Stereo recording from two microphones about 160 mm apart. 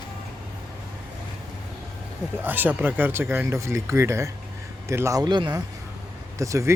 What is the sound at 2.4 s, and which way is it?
Speech, 10° right (ahead or behind).